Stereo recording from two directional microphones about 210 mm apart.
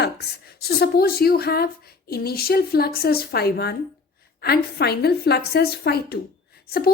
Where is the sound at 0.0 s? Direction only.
50° left (ahead or behind).